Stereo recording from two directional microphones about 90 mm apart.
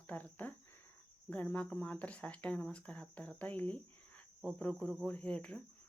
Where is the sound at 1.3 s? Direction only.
15° left (ahead or behind).